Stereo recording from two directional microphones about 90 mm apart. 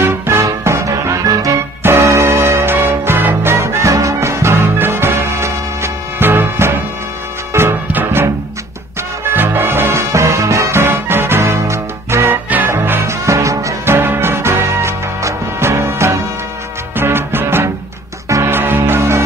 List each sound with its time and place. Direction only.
0.0 s music: 30° right (ahead or behind)
9.3 s music: 25° right (ahead or behind)